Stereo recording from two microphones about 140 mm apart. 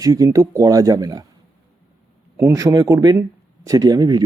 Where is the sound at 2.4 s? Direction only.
20° right (ahead or behind).